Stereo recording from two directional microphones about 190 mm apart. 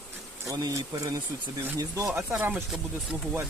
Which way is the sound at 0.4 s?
20° right (ahead or behind).